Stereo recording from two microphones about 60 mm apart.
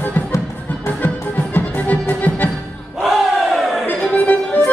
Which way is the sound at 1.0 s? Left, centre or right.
Left.